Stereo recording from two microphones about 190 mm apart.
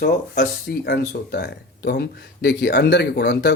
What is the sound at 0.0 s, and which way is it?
Speech, 55° left (ahead or behind).